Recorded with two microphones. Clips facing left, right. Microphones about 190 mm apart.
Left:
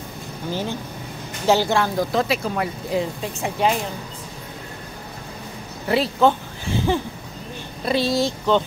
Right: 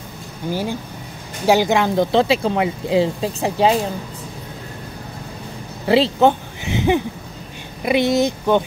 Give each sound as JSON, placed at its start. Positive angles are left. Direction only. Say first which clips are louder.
{"t": 0.5, "sound": "speech", "louder": "right 3 dB", "side_deg": -10}
{"t": 2.1, "sound": "speech", "louder": "right 6 dB", "side_deg": -30}
{"t": 5.9, "sound": "speech", "louder": "right 4 dB", "side_deg": -25}